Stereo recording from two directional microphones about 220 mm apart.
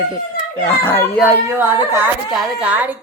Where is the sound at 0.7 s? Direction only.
10° left (ahead or behind).